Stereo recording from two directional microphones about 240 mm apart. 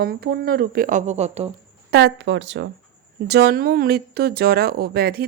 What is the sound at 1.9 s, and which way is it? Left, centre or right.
Speech, right.